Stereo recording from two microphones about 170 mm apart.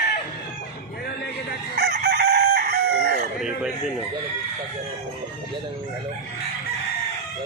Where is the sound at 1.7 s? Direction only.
65° right (ahead or behind).